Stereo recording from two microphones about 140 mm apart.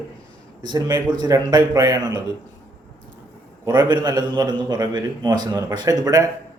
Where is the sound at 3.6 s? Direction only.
30° right (ahead or behind).